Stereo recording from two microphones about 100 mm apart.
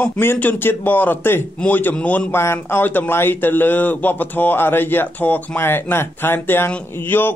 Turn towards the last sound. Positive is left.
turn(degrees=20)  # may be behind; listen again after turning